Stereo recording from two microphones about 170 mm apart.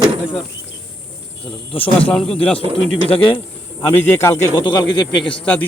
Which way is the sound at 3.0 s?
35° left (ahead or behind).